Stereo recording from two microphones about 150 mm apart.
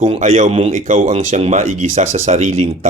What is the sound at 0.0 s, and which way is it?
Speech, 45° right (ahead or behind).